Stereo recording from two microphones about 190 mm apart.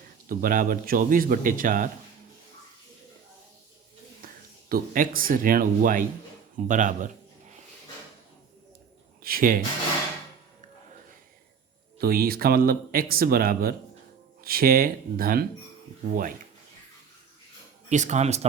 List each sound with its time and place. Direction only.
0.3 s speech: 45° right (ahead or behind)
4.7 s speech: 50° right (ahead or behind)
9.2 s speech: 50° right (ahead or behind)
11.9 s speech: 50° right (ahead or behind)
17.8 s speech: 40° right (ahead or behind)